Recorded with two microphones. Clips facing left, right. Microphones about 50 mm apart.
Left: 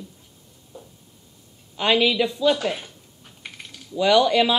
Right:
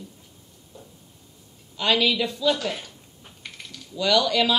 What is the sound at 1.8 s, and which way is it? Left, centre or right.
Speech, left.